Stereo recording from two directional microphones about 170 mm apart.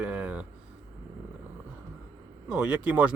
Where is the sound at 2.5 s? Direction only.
5° right (ahead or behind).